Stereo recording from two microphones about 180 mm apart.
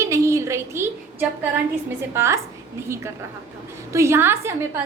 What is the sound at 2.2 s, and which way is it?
A woman's voice, 15° right (ahead or behind).